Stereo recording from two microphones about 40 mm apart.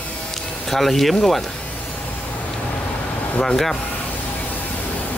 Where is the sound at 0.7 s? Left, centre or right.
Centre.